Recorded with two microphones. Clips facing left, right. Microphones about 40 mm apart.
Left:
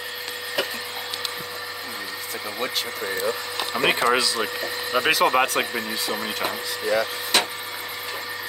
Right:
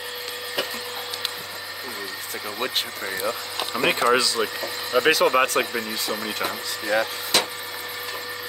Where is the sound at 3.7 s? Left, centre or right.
Centre.